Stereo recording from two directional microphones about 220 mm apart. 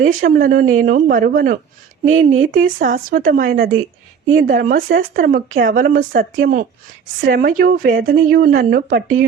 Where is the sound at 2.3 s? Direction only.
65° right (ahead or behind).